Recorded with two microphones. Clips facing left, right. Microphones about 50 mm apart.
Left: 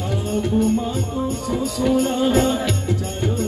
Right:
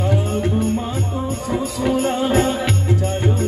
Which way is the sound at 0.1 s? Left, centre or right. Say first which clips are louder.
Left 3 dB; right.